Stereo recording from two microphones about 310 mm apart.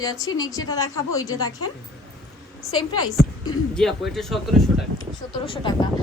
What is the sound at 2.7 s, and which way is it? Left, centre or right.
Speech, centre.